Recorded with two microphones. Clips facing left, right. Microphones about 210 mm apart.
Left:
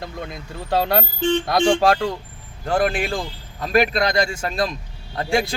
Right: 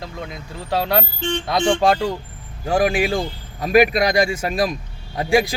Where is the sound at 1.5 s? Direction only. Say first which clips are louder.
Right 2 dB; 10° left (ahead or behind); by 4.5 s 15° right (ahead or behind).